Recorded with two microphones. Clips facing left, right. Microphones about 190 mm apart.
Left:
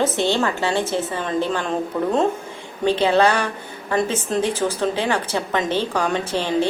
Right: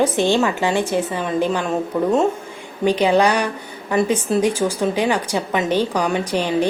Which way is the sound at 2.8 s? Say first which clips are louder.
Right 1 dB; 15° right (ahead or behind).